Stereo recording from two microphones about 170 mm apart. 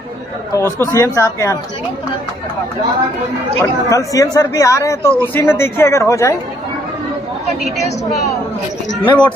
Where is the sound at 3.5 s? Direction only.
20° left (ahead or behind).